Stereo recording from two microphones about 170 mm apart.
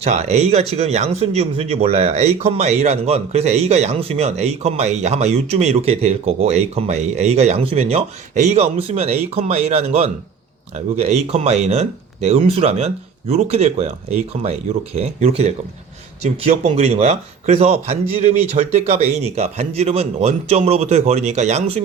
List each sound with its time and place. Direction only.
0.0 s speech: 40° right (ahead or behind)